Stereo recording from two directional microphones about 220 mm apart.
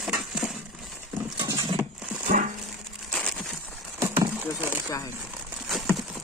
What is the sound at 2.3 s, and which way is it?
Dog, 35° right (ahead or behind).